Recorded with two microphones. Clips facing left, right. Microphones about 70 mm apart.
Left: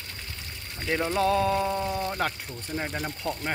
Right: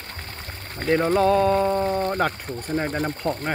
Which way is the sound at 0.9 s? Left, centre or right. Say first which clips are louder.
Right 7 dB; right.